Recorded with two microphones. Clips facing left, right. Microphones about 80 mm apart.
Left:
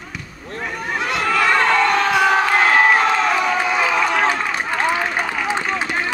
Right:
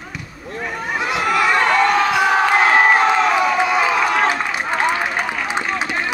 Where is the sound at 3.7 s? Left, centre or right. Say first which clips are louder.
Right 1 dB; centre.